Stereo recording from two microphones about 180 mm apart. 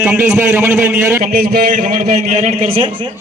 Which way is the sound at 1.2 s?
45° right (ahead or behind).